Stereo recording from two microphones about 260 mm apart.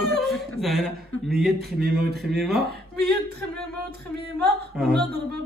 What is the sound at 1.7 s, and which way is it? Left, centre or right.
Speech, right.